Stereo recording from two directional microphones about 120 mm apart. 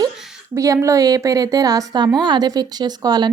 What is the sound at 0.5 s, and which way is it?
A woman's voice, 25° right (ahead or behind).